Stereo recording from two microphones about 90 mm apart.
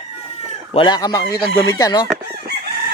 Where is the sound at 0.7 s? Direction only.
90° left.